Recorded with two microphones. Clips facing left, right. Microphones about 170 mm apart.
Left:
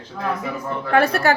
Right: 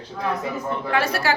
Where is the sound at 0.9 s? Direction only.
55° left (ahead or behind).